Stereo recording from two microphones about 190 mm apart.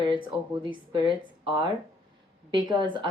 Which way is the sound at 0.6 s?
25° right (ahead or behind).